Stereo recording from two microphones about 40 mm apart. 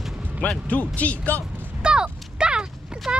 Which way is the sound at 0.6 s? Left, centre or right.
Left.